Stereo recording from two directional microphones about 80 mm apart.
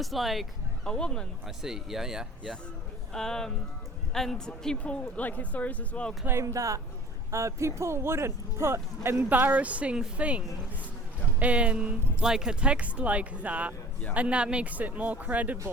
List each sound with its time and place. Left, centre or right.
0.0 s speech: centre
0.9 s speech: centre
1.5 s speech: centre
3.1 s speech: centre
6.2 s speech: right
9.3 s speech: right